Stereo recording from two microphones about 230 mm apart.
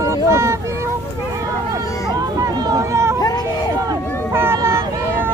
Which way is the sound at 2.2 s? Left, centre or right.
Centre.